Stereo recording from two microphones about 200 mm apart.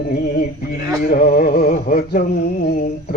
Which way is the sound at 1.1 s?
45° left (ahead or behind).